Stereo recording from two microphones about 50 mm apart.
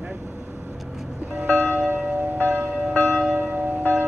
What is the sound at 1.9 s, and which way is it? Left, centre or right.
Church bell, right.